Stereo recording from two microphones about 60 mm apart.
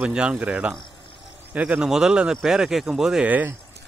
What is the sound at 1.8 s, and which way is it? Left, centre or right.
Speech, centre.